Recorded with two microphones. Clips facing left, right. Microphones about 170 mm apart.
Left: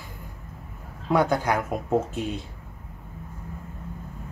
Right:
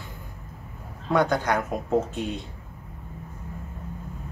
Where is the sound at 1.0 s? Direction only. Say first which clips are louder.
Even; 5° left (ahead or behind).